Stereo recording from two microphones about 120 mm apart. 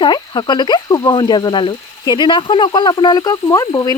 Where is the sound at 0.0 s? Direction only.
35° left (ahead or behind).